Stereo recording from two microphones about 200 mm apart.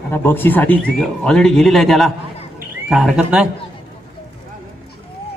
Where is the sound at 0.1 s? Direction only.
10° left (ahead or behind); by 3.4 s 5° right (ahead or behind).